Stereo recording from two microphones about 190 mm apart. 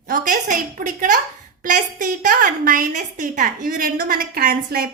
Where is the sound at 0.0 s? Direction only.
45° right (ahead or behind).